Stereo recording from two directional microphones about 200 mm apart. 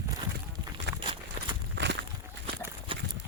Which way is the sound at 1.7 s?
60° right (ahead or behind).